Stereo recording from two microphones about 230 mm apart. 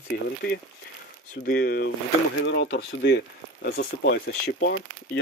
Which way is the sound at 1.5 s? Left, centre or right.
Left.